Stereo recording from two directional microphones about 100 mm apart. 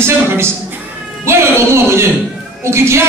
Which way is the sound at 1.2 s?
25° right (ahead or behind).